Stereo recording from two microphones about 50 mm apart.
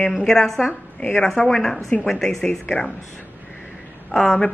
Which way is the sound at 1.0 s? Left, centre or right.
Centre.